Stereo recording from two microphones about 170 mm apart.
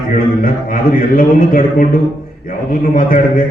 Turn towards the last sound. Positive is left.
turn(degrees=60)  # may be behind; listen again after turning